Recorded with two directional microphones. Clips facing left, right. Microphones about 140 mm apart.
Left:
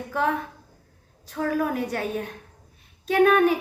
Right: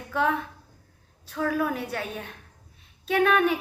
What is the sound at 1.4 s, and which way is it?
Speech, 40° left (ahead or behind).